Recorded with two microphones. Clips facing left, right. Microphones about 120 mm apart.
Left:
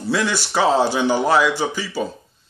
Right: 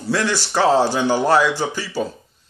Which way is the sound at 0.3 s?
15° left (ahead or behind).